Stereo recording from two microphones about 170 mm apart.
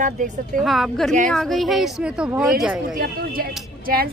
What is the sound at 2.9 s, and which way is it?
A woman's voice, 60° right (ahead or behind).